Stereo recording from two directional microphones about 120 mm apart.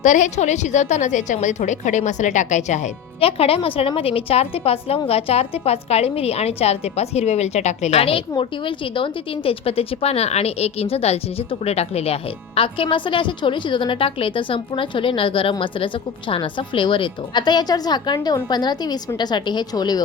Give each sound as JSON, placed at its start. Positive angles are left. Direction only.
{"t": 0.0, "sound": "a woman's voice", "side_deg": 90}
{"t": 3.2, "sound": "a woman's voice", "side_deg": 55}
{"t": 8.4, "sound": "a woman's voice", "side_deg": 45}